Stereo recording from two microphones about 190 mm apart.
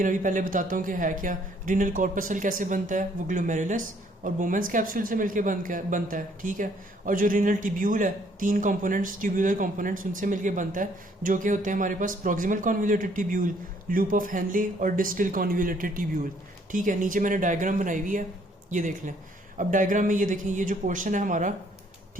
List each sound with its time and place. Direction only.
0.0 s speech: 45° right (ahead or behind)